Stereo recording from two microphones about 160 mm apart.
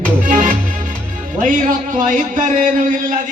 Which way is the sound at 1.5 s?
55° right (ahead or behind).